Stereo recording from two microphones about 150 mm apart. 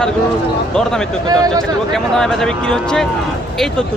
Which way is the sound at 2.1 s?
5° left (ahead or behind).